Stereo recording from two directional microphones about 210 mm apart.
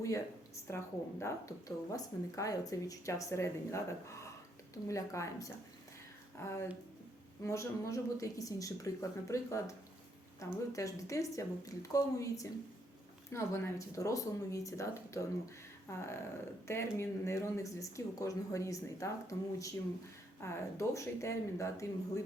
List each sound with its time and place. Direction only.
0.0 s speech: 15° left (ahead or behind)